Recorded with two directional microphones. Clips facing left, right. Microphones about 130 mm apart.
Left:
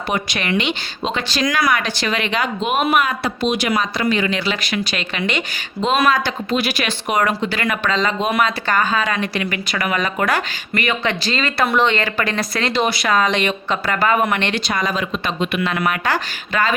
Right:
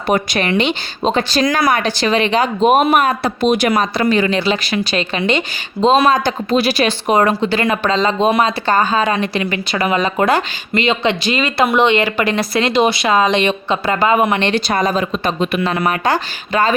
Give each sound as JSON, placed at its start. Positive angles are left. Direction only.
{"t": 0.1, "sound": "speech", "side_deg": -40}
{"t": 4.0, "sound": "a woman's voice", "side_deg": -40}